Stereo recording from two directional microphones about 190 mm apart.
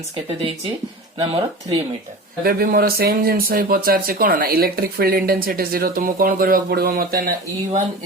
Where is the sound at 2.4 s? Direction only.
55° right (ahead or behind).